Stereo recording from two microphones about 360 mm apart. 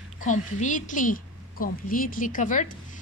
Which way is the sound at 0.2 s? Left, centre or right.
Left.